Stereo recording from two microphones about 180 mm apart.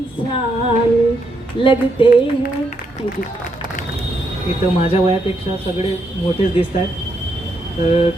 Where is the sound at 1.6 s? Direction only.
25° left (ahead or behind).